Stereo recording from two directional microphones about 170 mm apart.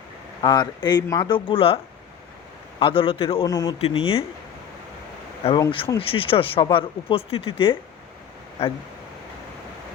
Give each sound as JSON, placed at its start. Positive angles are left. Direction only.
{"t": 0.4, "sound": "speech", "side_deg": 25}
{"t": 1.0, "sound": "speech", "side_deg": 15}
{"t": 1.3, "sound": "speech", "side_deg": 30}
{"t": 3.4, "sound": "speech", "side_deg": 20}
{"t": 3.8, "sound": "speech", "side_deg": 35}
{"t": 5.4, "sound": "speech", "side_deg": 35}